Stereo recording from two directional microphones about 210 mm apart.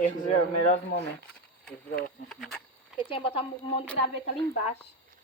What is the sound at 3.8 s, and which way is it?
Speech, 5° left (ahead or behind).